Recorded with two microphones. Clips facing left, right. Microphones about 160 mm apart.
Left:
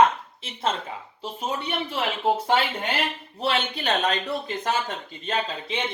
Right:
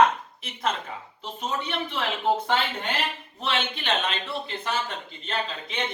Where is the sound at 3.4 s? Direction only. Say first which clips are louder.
Left 3 dB; 35° left (ahead or behind).